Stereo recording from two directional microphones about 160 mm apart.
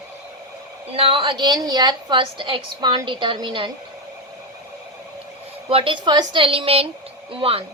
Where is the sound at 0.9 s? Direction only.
35° right (ahead or behind).